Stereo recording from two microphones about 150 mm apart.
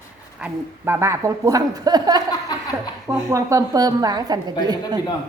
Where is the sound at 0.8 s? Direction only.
20° right (ahead or behind).